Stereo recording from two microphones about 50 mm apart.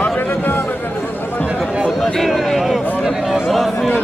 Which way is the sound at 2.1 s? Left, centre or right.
Centre.